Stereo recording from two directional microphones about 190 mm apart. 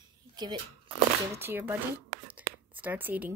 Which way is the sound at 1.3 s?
10° right (ahead or behind).